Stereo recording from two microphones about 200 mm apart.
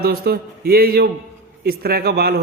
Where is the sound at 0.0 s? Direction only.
50° right (ahead or behind).